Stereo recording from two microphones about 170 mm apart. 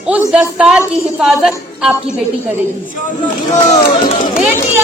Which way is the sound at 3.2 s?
45° left (ahead or behind).